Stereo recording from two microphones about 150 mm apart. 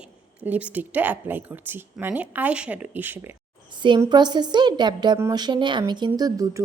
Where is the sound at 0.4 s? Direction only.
10° right (ahead or behind).